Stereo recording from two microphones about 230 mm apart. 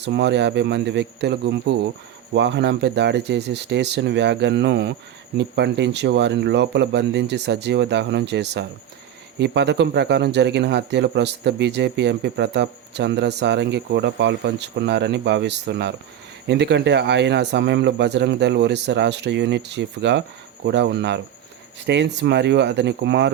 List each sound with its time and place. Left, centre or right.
0.0 s speech: right